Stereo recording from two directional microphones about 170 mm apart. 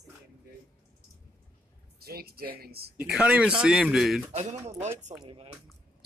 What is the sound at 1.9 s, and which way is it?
A man's voice, 65° right (ahead or behind).